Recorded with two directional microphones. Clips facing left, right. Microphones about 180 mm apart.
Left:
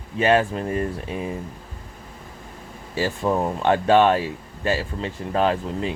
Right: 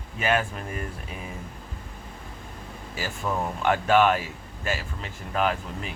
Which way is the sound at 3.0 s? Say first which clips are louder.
Left 7 dB; 30° left (ahead or behind).